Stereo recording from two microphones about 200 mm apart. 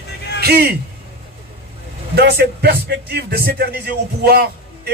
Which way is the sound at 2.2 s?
55° right (ahead or behind).